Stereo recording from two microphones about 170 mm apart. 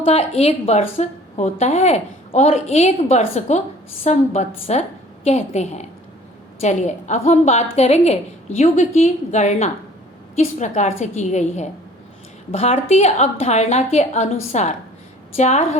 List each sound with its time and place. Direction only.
0.0 s a woman's voice: 35° left (ahead or behind)